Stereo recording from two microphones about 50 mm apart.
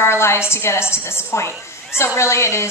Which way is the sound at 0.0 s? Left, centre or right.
Left.